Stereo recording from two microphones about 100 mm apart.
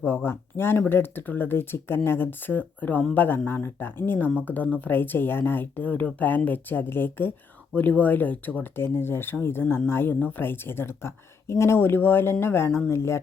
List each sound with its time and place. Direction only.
0.3 s speech: 25° left (ahead or behind)